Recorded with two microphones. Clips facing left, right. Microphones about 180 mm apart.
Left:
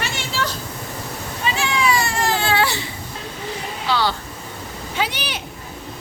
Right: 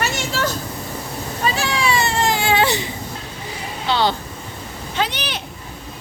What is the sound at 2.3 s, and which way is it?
Baby cry, 15° right (ahead or behind).